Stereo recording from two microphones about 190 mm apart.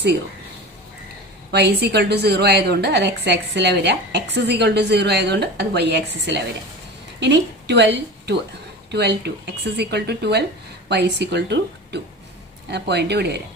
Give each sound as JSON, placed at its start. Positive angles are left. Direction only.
{"t": 1.5, "sound": "a woman's voice", "side_deg": -60}
{"t": 8.9, "sound": "a woman's voice", "side_deg": -60}